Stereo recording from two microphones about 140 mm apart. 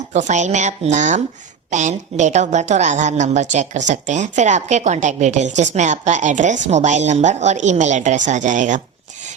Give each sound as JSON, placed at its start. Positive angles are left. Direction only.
{"t": 0.1, "sound": "a woman's voice", "side_deg": -55}